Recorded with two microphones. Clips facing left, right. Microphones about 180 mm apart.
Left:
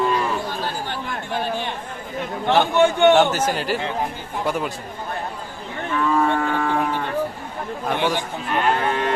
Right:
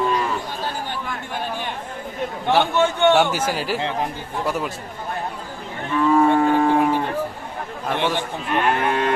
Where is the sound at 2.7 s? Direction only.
15° left (ahead or behind).